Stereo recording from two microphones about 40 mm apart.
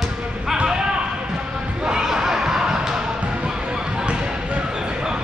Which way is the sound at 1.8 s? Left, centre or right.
Right.